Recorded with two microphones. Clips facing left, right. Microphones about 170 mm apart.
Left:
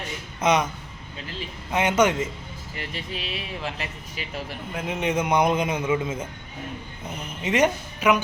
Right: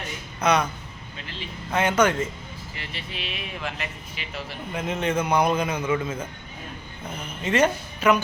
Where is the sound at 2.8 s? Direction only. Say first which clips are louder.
Left 4 dB; 40° left (ahead or behind).